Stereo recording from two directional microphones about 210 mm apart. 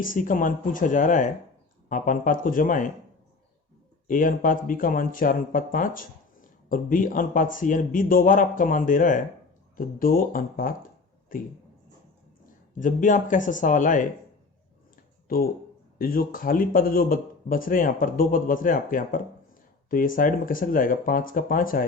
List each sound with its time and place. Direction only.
0.0 s speech: 40° left (ahead or behind)
4.0 s speech: 40° left (ahead or behind)
12.8 s speech: 40° left (ahead or behind)
16.0 s speech: 45° left (ahead or behind)